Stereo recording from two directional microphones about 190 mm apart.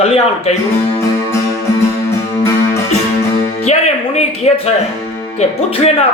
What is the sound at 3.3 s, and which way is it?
Music, 35° left (ahead or behind).